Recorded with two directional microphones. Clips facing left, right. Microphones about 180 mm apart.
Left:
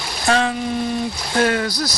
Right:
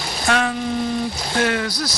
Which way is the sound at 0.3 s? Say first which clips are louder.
Left 2 dB; 30° left (ahead or behind).